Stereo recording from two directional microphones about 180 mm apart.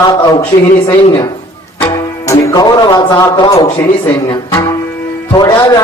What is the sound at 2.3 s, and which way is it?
A man's voice, 20° left (ahead or behind).